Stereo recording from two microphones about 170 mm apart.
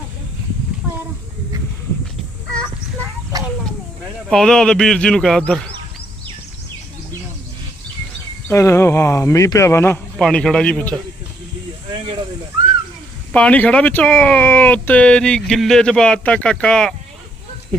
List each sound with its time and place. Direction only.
4.3 s speech: 5° left (ahead or behind)
8.4 s speech: 15° left (ahead or behind)
13.3 s speech: 10° left (ahead or behind)